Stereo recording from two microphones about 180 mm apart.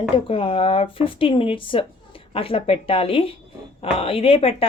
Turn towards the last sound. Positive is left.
turn(degrees=30)  # may be behind; listen again after turning